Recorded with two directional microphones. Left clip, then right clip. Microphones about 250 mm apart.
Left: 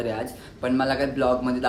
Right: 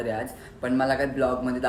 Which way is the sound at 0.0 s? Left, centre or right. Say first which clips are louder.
Left 1 dB; centre.